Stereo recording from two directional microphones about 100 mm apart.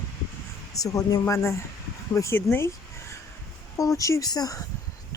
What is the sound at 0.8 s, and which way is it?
Speech, 35° left (ahead or behind).